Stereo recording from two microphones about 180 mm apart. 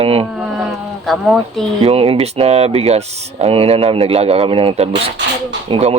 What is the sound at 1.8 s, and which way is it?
Speech, 35° right (ahead or behind).